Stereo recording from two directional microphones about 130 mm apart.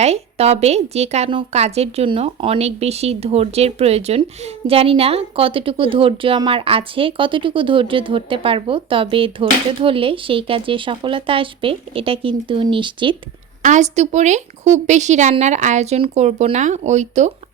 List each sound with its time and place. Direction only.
0.0 s a woman's voice: 55° right (ahead or behind); by 13.1 s 40° right (ahead or behind)
13.6 s speech: 65° right (ahead or behind)